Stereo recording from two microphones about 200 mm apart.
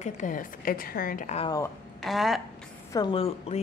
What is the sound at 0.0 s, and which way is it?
A woman's voice, 40° left (ahead or behind).